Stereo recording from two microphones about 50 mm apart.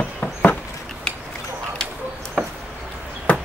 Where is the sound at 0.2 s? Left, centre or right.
Left.